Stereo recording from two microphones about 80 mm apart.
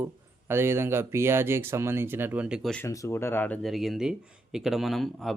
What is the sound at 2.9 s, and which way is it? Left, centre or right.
Speech, left.